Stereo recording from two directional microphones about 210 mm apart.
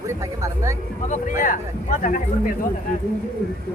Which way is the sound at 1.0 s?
40° left (ahead or behind).